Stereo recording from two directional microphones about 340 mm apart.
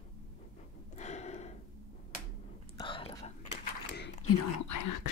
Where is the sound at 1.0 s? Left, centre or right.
Centre.